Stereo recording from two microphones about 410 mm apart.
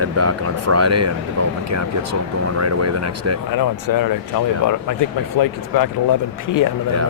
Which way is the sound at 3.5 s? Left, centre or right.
Left.